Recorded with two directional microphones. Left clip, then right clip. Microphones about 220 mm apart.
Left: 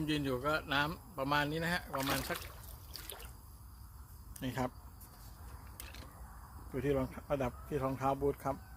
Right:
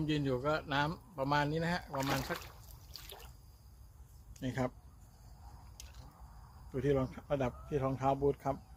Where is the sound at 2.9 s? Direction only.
10° right (ahead or behind).